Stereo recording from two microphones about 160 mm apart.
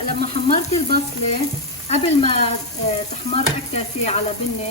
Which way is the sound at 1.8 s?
40° left (ahead or behind).